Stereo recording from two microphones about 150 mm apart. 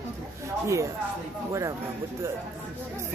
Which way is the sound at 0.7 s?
20° right (ahead or behind).